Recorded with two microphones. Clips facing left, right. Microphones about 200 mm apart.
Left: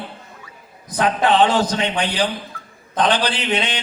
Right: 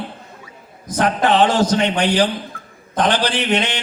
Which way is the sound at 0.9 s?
45° right (ahead or behind).